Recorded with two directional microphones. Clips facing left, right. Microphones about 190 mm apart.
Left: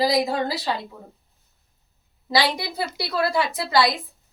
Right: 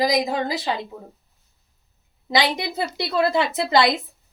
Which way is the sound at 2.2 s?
20° right (ahead or behind).